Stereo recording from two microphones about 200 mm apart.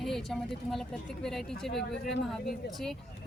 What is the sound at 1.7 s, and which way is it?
Speech, 55° left (ahead or behind).